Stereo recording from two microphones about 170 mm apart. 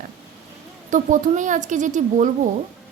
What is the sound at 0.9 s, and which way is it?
A woman's voice, 45° right (ahead or behind).